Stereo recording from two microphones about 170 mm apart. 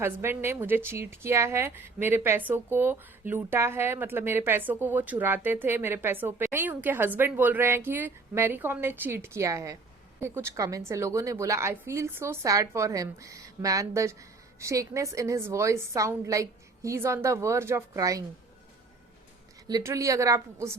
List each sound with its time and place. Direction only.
0.0 s a woman's voice: 15° right (ahead or behind)
19.6 s a woman's voice: 20° right (ahead or behind)